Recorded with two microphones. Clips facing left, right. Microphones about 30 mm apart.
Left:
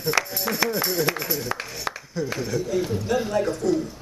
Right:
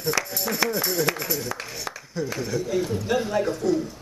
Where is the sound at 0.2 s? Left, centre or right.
Centre.